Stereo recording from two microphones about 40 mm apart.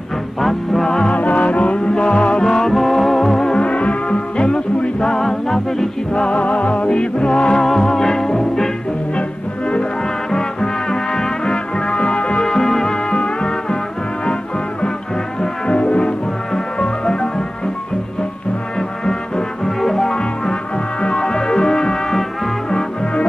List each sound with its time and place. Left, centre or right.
0.4 s music: centre
1.1 s music: left
2.4 s music: centre
3.5 s music: left
5.2 s music: centre
6.2 s music: left
7.6 s music: centre
10.3 s music: centre
12.4 s music: centre
15.4 s music: left
18.8 s music: centre
20.2 s music: left